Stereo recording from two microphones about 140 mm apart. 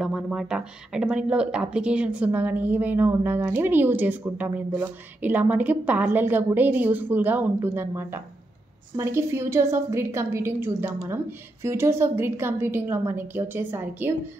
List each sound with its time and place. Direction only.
0.0 s speech: 5° right (ahead or behind)